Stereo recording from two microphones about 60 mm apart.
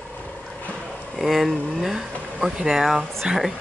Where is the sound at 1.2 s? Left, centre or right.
Centre.